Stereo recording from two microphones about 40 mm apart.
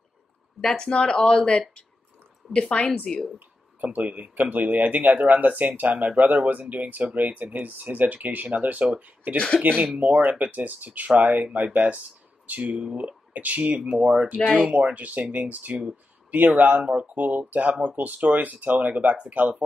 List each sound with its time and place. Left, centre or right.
0.6 s speech: centre
3.3 s a sound: right
4.2 s speech: right